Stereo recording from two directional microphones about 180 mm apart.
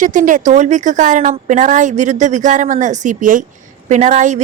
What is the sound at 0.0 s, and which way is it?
A woman's voice, 45° right (ahead or behind).